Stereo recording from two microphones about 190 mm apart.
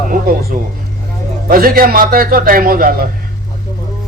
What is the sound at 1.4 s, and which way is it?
Speech, 50° right (ahead or behind).